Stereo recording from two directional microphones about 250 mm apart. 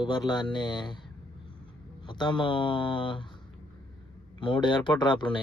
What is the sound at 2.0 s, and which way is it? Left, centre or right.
Speech, centre.